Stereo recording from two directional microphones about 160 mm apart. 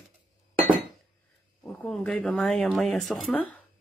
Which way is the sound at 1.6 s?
5° left (ahead or behind).